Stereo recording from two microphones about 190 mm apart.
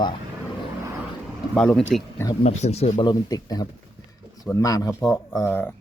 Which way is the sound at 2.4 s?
35° left (ahead or behind).